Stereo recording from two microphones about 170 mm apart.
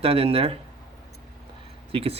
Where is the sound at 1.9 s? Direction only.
35° right (ahead or behind).